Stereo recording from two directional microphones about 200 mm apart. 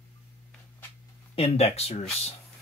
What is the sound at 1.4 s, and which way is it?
Speech, 30° left (ahead or behind).